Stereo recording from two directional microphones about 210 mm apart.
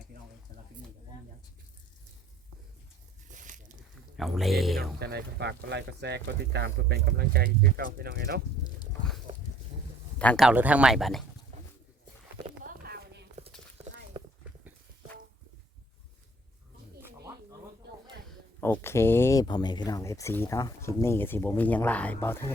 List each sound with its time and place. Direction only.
3.4 s a sound: 40° right (ahead or behind)
4.2 s speech: centre (ahead or behind)
4.9 s speech: 50° right (ahead or behind)
10.2 s speech: 5° left (ahead or behind)
10.5 s speech: 5° right (ahead or behind)
11.5 s pigeon: 30° right (ahead or behind)
12.6 s a sound: 50° right (ahead or behind)
17.8 s a sound: 50° right (ahead or behind)
18.6 s speech: 10° left (ahead or behind)